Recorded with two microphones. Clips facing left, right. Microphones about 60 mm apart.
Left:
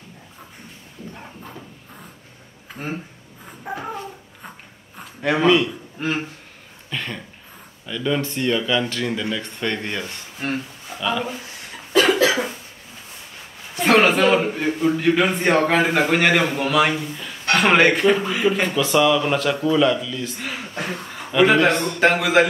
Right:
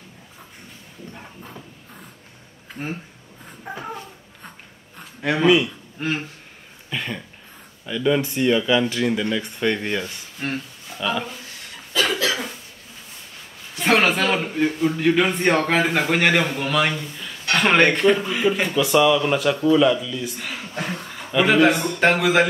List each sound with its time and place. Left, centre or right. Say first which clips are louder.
2.7 s a sound: left 1 dB; centre
5.9 s speech: left 1 dB; centre
6.9 s a sound: right 1 dB; centre
7.8 s speech: right 3 dB; centre
12.1 s cough: left 6 dB; centre
13.7 s a man's voice: left 3 dB; centre
20.7 s speech: right 1 dB; centre
21.3 s speech: left 1 dB; centre